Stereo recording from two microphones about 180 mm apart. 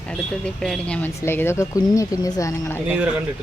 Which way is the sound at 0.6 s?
5° left (ahead or behind).